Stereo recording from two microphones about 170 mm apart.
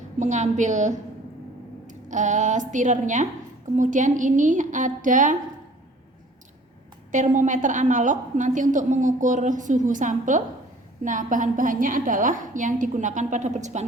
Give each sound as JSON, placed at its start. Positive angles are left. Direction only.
{"t": 0.2, "sound": "a woman's voice", "side_deg": -45}
{"t": 7.1, "sound": "a woman's voice", "side_deg": -45}